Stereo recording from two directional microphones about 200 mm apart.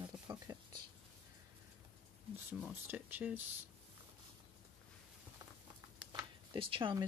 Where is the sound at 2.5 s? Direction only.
5° right (ahead or behind).